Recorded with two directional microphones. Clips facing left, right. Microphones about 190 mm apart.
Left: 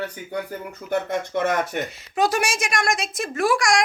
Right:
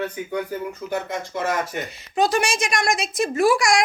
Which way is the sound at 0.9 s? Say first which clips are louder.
Left 5 dB; 60° left (ahead or behind).